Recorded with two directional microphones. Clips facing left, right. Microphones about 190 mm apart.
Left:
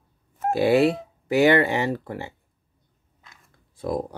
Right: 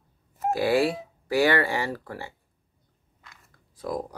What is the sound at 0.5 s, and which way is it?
Speech, 25° left (ahead or behind).